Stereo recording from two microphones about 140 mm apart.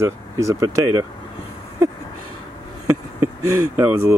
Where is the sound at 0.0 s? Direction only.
20° right (ahead or behind).